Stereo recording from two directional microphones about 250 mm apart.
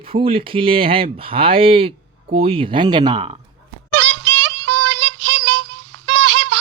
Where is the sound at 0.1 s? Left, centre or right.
Right.